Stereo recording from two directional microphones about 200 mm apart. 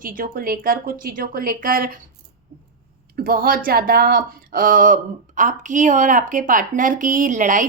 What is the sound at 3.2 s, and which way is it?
Speech, 45° right (ahead or behind).